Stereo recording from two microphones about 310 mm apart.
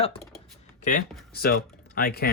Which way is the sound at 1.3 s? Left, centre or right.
Left.